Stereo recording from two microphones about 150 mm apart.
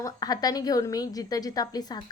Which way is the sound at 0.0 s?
25° left (ahead or behind).